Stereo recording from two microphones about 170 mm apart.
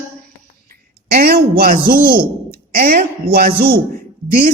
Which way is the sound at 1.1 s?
65° right (ahead or behind).